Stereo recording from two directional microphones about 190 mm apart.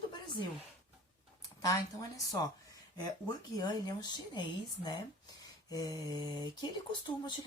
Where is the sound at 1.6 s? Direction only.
20° left (ahead or behind).